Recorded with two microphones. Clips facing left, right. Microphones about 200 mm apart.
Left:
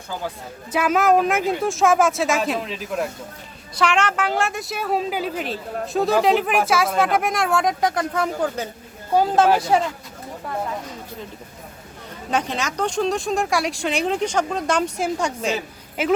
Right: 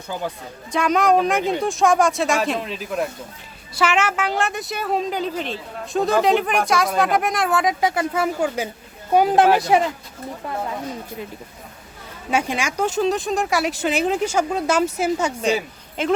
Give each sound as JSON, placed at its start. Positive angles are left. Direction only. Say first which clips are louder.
{"t": 0.7, "sound": "speech", "louder": "even", "side_deg": 5}
{"t": 12.3, "sound": "speech", "louder": "right 2 dB", "side_deg": -10}